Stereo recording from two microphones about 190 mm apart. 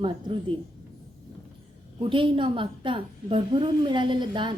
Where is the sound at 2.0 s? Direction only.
25° right (ahead or behind).